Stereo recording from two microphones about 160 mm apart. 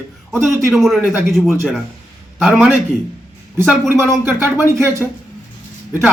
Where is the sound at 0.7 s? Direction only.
Centre (ahead or behind).